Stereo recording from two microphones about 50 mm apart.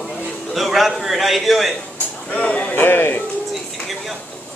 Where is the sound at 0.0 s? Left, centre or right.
Centre.